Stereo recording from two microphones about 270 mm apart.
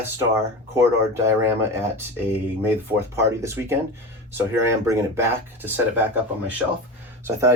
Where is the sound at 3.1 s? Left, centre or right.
Centre.